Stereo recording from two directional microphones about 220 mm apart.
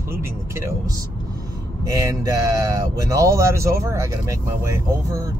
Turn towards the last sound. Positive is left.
turn(degrees=-15)  # may be behind; listen again after turning